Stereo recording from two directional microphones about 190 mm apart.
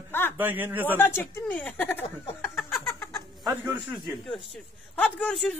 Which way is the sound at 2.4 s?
Centre (ahead or behind).